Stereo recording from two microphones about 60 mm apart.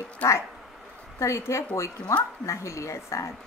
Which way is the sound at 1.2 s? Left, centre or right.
Left.